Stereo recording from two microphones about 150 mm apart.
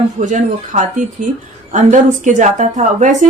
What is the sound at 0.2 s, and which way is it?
Speech, 55° right (ahead or behind).